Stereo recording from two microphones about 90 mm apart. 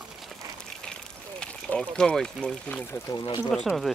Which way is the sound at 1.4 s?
15° left (ahead or behind).